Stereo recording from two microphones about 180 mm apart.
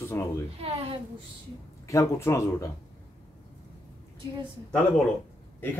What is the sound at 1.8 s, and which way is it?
Speech, 15° left (ahead or behind).